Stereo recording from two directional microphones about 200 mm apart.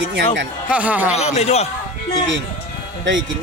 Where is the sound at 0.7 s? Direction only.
5° right (ahead or behind).